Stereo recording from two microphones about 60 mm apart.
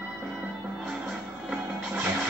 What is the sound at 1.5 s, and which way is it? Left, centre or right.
Music, right.